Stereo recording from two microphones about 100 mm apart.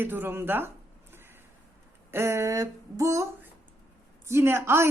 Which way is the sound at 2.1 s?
25° right (ahead or behind).